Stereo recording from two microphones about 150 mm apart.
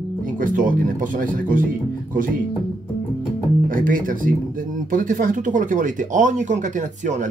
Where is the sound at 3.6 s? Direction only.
65° right (ahead or behind).